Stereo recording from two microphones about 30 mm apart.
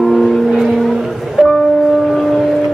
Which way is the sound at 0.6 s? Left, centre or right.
Centre.